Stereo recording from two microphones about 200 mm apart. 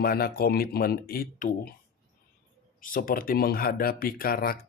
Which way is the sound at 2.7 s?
45° left (ahead or behind).